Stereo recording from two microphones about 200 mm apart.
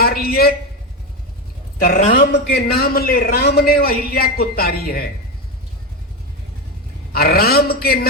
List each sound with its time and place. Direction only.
0.0 s a man's voice: 50° left (ahead or behind)
1.8 s a man's voice: 45° left (ahead or behind)
7.1 s a man's voice: 50° left (ahead or behind)